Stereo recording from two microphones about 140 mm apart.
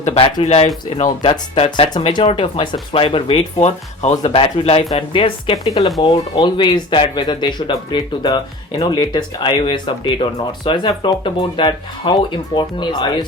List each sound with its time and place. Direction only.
0.0 s speech: 50° left (ahead or behind); by 13.2 s 30° left (ahead or behind)